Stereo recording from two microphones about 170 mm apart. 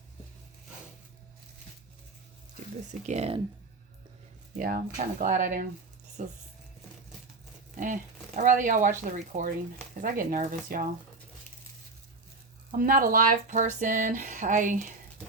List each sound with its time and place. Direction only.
3.1 s speech: 35° right (ahead or behind)
4.5 s speech: 50° right (ahead or behind)
8.4 s speech: 50° right (ahead or behind)
12.7 s speech: 55° right (ahead or behind)